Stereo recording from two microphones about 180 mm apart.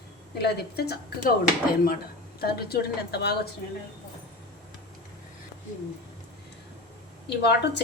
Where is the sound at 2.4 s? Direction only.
60° left (ahead or behind).